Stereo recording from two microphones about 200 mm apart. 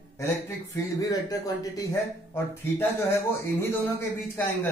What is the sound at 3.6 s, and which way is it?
A man's voice, 10° left (ahead or behind).